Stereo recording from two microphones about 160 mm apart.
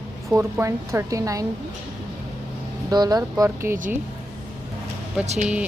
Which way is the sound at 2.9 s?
25° right (ahead or behind).